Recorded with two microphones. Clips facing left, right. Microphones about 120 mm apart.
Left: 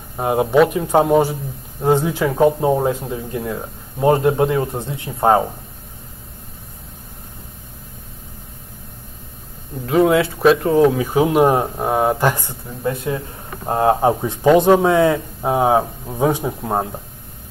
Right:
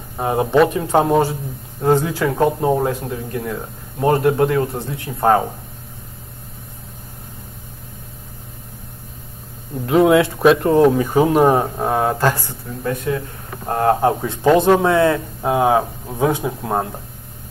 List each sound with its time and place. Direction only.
0.2 s speech: 5° left (ahead or behind)
9.8 s speech: centre (ahead or behind)
11.8 s speech: 15° left (ahead or behind)